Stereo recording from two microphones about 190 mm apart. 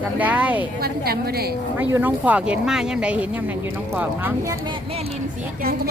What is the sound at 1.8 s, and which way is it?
Speech, 10° right (ahead or behind).